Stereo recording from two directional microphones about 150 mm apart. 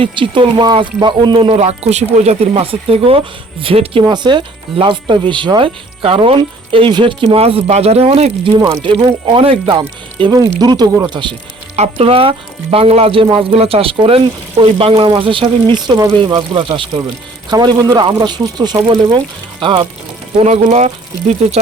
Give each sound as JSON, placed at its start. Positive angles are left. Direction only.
{"t": 0.0, "sound": "speech", "side_deg": -30}
{"t": 8.6, "sound": "speech", "side_deg": -30}
{"t": 20.4, "sound": "speech", "side_deg": -45}